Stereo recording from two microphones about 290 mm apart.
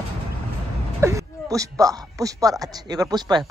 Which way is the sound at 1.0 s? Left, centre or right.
Centre.